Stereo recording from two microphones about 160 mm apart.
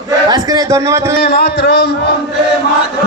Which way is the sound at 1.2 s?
90° left.